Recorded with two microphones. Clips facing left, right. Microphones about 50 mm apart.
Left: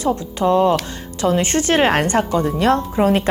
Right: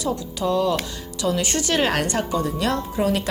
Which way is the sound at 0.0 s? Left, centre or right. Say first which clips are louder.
Left 6 dB; left.